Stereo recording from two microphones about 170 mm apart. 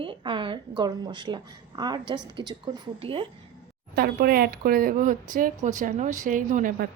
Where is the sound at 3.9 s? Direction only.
65° right (ahead or behind).